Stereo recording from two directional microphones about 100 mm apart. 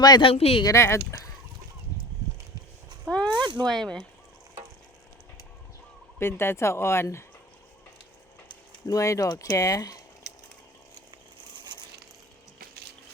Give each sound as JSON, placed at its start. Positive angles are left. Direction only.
{"t": 0.2, "sound": "speech", "side_deg": 75}
{"t": 0.6, "sound": "speech", "side_deg": 30}
{"t": 3.2, "sound": "a sound", "side_deg": -50}
{"t": 3.7, "sound": "speech", "side_deg": 5}
{"t": 6.1, "sound": "speech", "side_deg": 25}
{"t": 8.9, "sound": "speech", "side_deg": 30}